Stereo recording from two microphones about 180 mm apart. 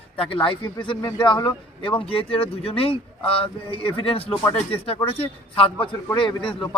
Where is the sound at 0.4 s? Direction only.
25° left (ahead or behind).